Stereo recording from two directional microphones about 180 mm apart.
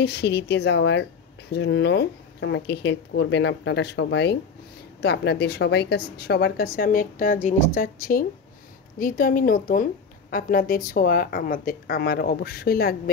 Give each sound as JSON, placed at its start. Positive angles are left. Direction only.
{"t": 0.0, "sound": "a woman's voice", "side_deg": 70}